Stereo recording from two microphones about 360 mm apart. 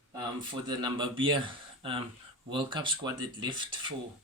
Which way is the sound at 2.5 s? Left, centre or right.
Centre.